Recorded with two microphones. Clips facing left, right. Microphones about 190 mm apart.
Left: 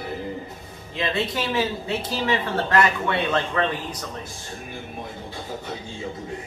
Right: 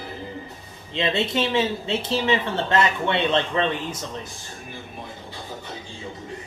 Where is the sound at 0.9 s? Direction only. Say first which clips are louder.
Right 2 dB; 25° right (ahead or behind).